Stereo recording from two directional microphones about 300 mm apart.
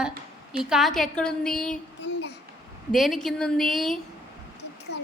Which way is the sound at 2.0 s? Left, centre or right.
Left.